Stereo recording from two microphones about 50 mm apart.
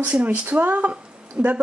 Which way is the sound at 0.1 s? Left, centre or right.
Right.